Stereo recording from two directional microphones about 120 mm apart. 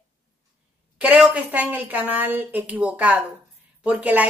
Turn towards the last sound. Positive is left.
turn(degrees=-15)  # may be behind; listen again after turning